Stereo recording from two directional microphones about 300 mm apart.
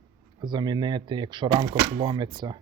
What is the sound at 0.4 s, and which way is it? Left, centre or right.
Speech, centre.